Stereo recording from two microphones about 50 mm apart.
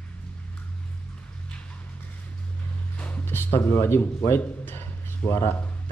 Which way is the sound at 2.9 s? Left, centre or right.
Left.